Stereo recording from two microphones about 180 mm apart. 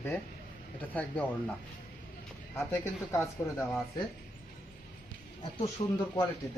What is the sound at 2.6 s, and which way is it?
Speech, 15° left (ahead or behind).